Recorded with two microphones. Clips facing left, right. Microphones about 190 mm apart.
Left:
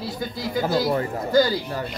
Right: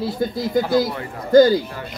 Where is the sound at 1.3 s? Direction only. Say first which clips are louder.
Right 8 dB; 50° right (ahead or behind).